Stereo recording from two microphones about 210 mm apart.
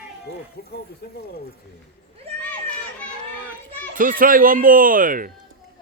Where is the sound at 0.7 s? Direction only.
45° left (ahead or behind).